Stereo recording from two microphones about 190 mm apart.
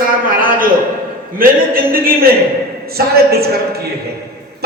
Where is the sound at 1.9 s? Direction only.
50° right (ahead or behind).